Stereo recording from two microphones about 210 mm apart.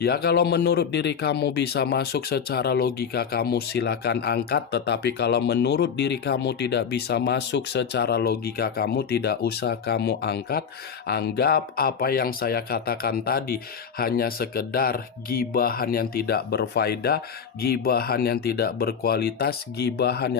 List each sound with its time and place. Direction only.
0.0 s speech: 45° left (ahead or behind)